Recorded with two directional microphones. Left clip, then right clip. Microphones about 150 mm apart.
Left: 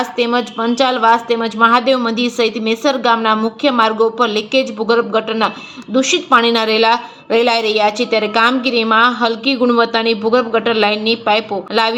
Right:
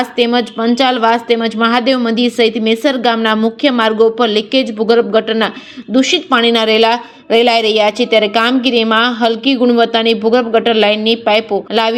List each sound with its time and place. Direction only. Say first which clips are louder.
0.0 s a woman's voice: right 3 dB; 40° right (ahead or behind)